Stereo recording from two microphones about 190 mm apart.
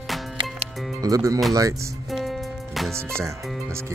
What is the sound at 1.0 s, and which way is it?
Speech, 20° right (ahead or behind).